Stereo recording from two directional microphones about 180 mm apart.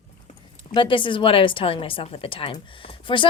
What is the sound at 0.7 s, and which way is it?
A woman's voice, 30° left (ahead or behind).